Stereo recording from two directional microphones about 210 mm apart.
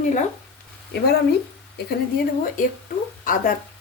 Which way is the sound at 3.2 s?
40° left (ahead or behind).